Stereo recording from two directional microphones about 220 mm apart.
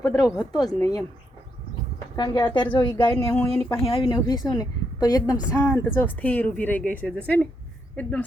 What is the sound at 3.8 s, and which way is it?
A woman's voice, 25° left (ahead or behind).